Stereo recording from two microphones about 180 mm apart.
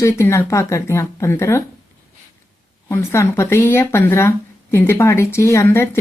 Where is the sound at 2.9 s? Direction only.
15° left (ahead or behind).